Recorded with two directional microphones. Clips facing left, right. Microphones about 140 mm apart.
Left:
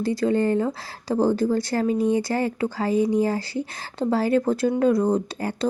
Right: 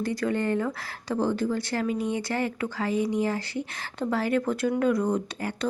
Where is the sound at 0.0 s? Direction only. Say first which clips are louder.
Left 5 dB; 30° left (ahead or behind).